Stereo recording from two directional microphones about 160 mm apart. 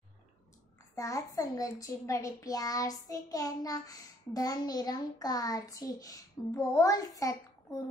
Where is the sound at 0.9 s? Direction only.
20° left (ahead or behind).